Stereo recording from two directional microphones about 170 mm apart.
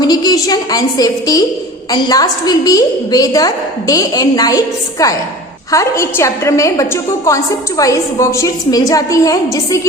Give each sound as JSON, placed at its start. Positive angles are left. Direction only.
{"t": 0.0, "sound": "a woman's voice", "side_deg": 20}